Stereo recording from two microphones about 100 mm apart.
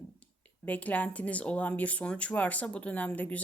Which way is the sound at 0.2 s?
15° left (ahead or behind).